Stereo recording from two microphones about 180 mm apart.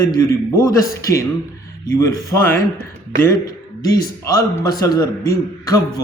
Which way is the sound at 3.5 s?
20° left (ahead or behind).